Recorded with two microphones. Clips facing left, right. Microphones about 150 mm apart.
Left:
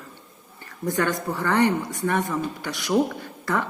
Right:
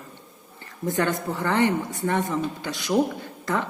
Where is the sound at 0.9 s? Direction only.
20° right (ahead or behind).